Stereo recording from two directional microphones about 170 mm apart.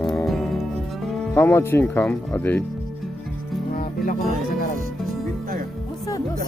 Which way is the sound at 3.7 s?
60° left (ahead or behind).